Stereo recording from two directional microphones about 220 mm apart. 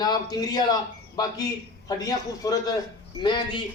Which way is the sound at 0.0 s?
20° left (ahead or behind).